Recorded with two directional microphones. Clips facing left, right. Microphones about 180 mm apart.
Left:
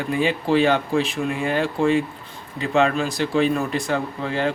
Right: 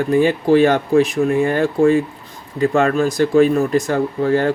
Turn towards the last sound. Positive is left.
turn(degrees=-45)  # may be behind; listen again after turning